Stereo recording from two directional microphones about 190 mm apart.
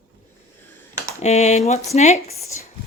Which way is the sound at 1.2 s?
35° left (ahead or behind).